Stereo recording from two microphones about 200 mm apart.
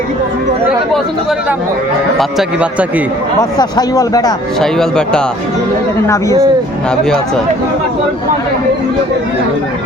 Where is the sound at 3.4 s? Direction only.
20° left (ahead or behind).